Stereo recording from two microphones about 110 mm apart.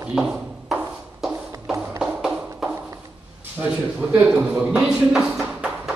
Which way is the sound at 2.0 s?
5° right (ahead or behind).